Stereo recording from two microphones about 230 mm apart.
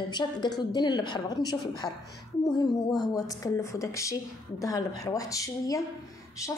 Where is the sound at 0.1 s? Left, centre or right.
Centre.